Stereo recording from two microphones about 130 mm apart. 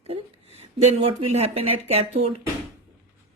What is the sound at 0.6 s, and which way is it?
Speech, 50° right (ahead or behind).